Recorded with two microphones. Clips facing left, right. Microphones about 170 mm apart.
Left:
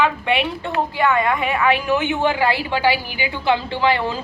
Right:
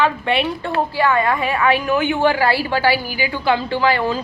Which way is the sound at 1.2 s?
35° right (ahead or behind).